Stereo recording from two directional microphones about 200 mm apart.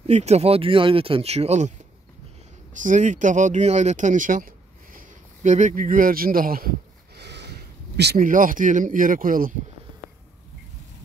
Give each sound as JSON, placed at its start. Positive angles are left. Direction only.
{"t": 0.0, "sound": "speech", "side_deg": -35}
{"t": 2.7, "sound": "speech", "side_deg": -40}
{"t": 7.2, "sound": "speech", "side_deg": -55}